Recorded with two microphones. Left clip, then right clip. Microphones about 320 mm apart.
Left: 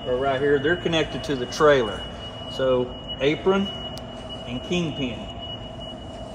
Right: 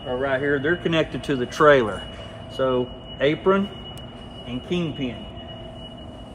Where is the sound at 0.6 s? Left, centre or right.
Right.